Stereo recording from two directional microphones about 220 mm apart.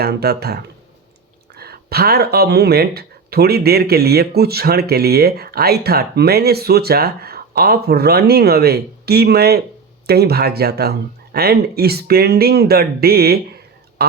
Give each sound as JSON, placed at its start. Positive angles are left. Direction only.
{"t": 0.0, "sound": "speech", "side_deg": -45}